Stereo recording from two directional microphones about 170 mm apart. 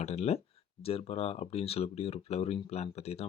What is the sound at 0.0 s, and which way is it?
Speech, 40° left (ahead or behind).